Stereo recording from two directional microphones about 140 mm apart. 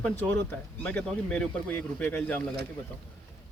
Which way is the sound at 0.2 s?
10° left (ahead or behind).